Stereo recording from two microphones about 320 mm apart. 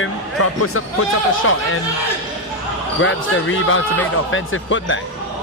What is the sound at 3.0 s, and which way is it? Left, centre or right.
Speech, left.